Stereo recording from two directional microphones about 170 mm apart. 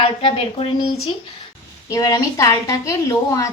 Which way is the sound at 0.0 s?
35° left (ahead or behind).